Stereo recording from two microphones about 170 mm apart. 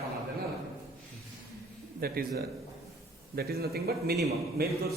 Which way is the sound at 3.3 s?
65° right (ahead or behind).